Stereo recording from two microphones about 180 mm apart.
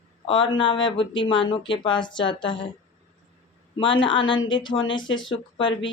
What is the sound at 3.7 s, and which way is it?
Speech, 25° left (ahead or behind).